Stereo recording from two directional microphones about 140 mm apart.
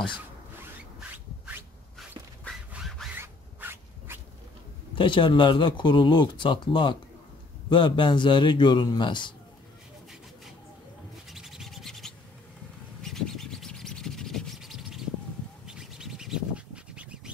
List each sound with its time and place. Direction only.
1.1 s rub: 15° right (ahead or behind)
2.7 s a sound: 5° right (ahead or behind)
3.2 s a sound: 15° right (ahead or behind)
4.9 s speech: 35° left (ahead or behind)
11.2 s scratch: centre (ahead or behind)
15.6 s bird: 5° right (ahead or behind)